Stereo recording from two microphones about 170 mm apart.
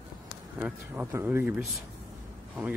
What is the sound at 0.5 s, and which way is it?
Speech, 10° right (ahead or behind).